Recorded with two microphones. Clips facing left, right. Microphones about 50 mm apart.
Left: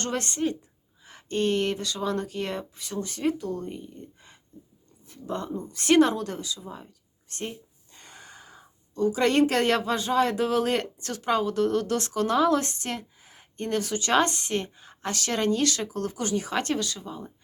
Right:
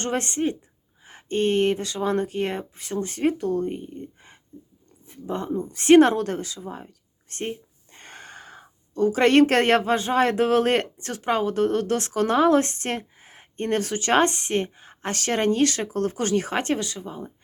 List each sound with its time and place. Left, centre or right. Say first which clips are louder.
0.0 s speech: right 3 dB; right
6.0 s speech: right 4 dB; right
16.6 s speech: right 2 dB; right